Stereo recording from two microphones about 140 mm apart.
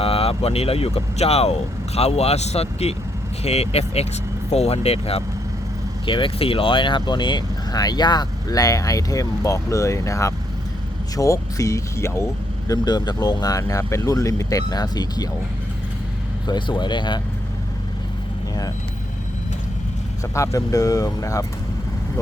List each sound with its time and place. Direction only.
0.0 s speech: 45° left (ahead or behind); by 15.3 s 30° left (ahead or behind)
16.5 s speech: 35° left (ahead or behind)
20.3 s speech: 20° left (ahead or behind)